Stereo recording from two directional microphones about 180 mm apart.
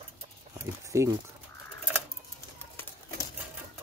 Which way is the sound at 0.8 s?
15° right (ahead or behind).